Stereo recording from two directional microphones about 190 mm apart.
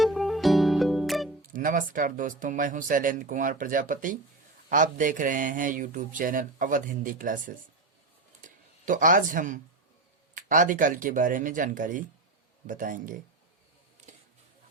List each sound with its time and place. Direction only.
0.0 s music: centre (ahead or behind)
1.5 s a man's voice: 45° right (ahead or behind)
8.4 s a sound: 45° right (ahead or behind)
10.3 s a man's voice: 45° right (ahead or behind)